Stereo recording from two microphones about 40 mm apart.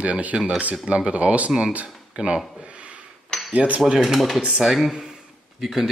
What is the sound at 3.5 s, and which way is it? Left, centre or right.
Speech, right.